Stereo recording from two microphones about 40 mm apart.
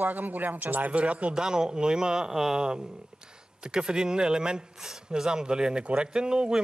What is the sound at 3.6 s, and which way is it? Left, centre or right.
Speech, centre.